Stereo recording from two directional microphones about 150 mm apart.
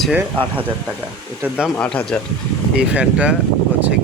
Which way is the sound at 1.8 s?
5° left (ahead or behind).